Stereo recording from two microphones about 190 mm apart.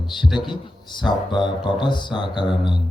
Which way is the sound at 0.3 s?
25° left (ahead or behind).